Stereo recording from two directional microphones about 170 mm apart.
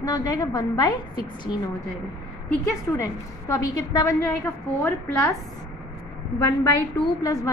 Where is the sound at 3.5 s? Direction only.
20° left (ahead or behind).